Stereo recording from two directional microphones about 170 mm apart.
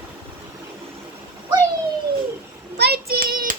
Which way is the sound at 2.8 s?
65° right (ahead or behind).